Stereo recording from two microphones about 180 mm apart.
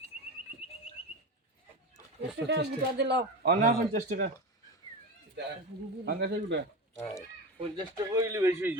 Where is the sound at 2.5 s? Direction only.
70° right (ahead or behind).